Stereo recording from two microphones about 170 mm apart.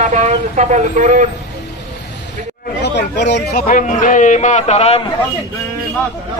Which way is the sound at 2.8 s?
85° left.